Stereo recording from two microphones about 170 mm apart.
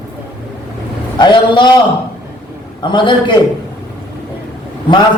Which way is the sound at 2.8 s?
25° left (ahead or behind).